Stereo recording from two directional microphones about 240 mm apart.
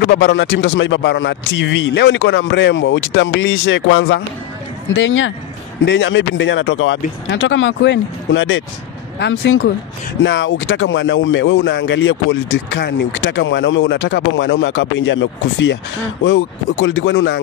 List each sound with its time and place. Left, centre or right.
0.1 s speech: left